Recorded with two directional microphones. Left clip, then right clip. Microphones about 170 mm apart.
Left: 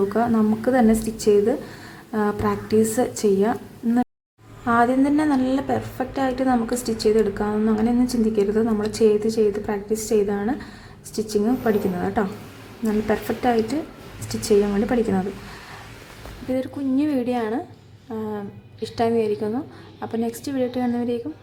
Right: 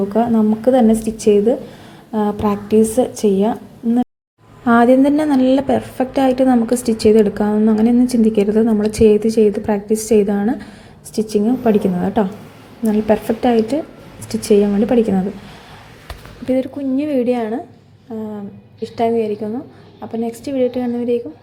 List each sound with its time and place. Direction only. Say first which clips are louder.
0.1 s a woman's voice: right 5 dB; 10° right (ahead or behind)
4.6 s a woman's voice: right 7 dB; 20° right (ahead or behind)
16.6 s a woman's voice: right 2 dB; 10° right (ahead or behind); by 20.1 s 5° left (ahead or behind)
20.2 s a woman's voice: right 9 dB; 10° right (ahead or behind)